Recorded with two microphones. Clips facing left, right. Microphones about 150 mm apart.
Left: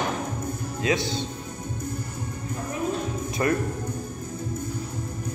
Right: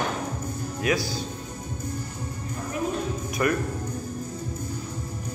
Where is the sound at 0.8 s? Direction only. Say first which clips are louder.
Left 1 dB; 25° left (ahead or behind).